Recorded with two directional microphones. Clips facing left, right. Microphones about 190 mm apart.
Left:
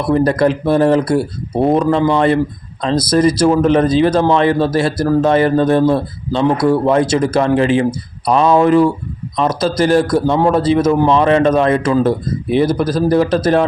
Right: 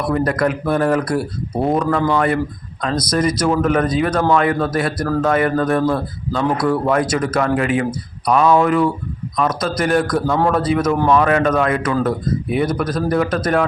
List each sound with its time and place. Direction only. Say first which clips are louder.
0.0 s a man's voice: left 5 dB; 30° left (ahead or behind)